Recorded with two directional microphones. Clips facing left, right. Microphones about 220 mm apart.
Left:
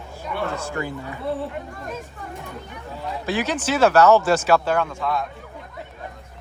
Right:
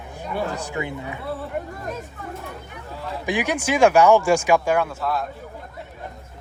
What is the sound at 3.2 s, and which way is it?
Speech, 15° right (ahead or behind).